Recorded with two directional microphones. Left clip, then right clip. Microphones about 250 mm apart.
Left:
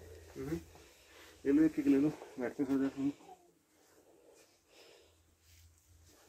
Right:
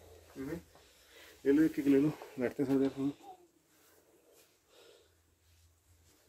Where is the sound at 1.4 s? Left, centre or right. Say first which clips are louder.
Right 1 dB; right.